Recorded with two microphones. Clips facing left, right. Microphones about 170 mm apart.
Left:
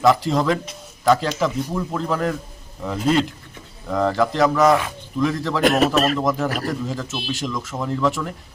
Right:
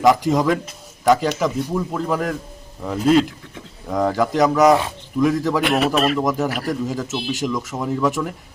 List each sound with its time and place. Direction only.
0.0 s a man's voice: 15° right (ahead or behind)
5.6 s speech: 40° left (ahead or behind)
6.1 s a man's voice: 5° right (ahead or behind)